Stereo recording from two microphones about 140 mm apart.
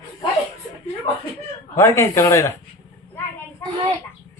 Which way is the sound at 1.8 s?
20° left (ahead or behind).